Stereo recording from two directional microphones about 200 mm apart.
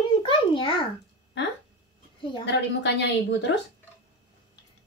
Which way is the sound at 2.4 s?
60° left (ahead or behind).